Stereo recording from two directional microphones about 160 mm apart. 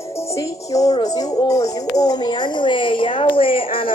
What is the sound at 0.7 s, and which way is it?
Speech, 25° left (ahead or behind).